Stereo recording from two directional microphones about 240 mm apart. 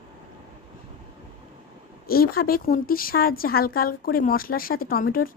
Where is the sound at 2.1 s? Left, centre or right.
Left.